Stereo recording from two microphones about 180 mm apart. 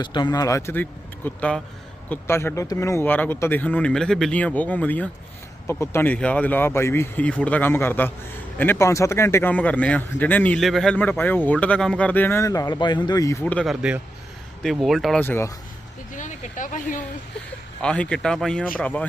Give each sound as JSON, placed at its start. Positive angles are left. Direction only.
{"t": 0.0, "sound": "a man's voice", "side_deg": 25}
{"t": 15.2, "sound": "a man's voice", "side_deg": 10}
{"t": 16.1, "sound": "speech", "side_deg": 45}
{"t": 17.8, "sound": "a man's voice", "side_deg": 5}